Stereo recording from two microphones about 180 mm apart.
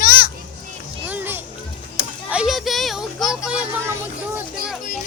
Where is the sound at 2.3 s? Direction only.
5° right (ahead or behind).